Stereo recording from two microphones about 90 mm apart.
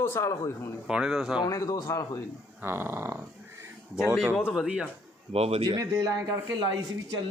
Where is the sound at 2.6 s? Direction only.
25° right (ahead or behind).